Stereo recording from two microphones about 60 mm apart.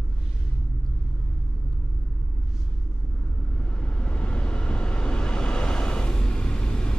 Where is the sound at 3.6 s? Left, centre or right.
Centre.